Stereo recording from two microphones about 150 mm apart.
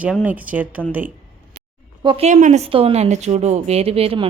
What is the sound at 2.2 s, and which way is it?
A woman's voice, 50° right (ahead or behind).